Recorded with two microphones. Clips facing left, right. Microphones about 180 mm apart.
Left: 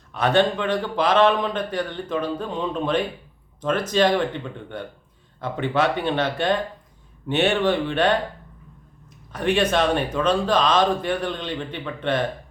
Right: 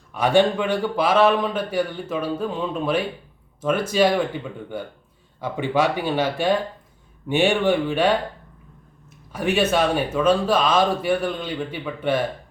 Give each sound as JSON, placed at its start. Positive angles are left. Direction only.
{"t": 0.1, "sound": "speech", "side_deg": -10}
{"t": 9.3, "sound": "speech", "side_deg": -5}